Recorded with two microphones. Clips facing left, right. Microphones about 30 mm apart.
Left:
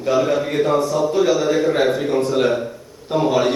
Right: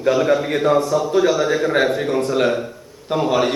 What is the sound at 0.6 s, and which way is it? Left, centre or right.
A man's voice, centre.